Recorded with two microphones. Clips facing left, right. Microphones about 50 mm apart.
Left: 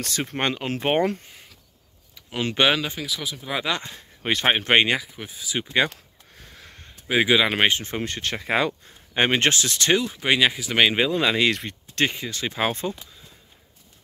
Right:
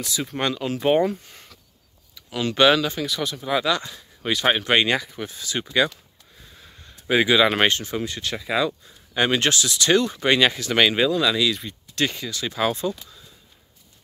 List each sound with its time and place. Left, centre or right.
0.0 s speech: left
2.1 s speech: left
3.0 s speech: centre
3.6 s speech: left
4.9 s speech: centre
6.4 s a sound: left
7.2 s speech: centre
7.8 s speech: left
9.9 s speech: centre
11.1 s speech: left